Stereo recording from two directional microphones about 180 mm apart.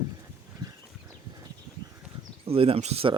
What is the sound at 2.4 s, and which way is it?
Speech, 30° right (ahead or behind).